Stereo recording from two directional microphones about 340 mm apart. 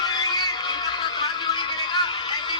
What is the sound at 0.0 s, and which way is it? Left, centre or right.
Music, centre.